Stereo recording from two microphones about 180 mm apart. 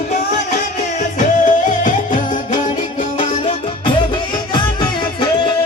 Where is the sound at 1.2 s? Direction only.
45° left (ahead or behind).